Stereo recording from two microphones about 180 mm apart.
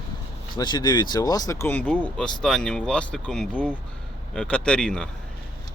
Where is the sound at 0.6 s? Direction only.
25° left (ahead or behind); by 5.1 s 5° left (ahead or behind).